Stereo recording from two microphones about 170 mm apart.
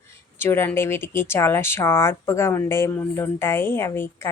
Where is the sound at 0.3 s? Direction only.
15° left (ahead or behind).